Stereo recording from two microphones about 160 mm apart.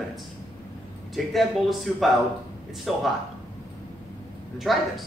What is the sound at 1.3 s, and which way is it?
Speech, centre (ahead or behind).